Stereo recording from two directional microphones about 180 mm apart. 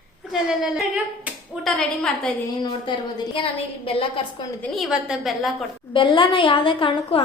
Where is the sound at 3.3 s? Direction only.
30° left (ahead or behind).